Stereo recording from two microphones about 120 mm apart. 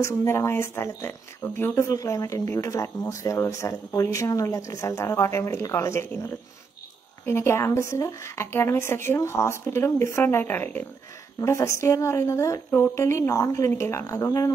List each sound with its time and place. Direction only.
0.0 s speech: 20° left (ahead or behind)